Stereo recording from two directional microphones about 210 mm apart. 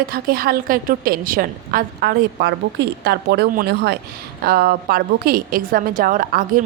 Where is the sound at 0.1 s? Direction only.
45° right (ahead or behind).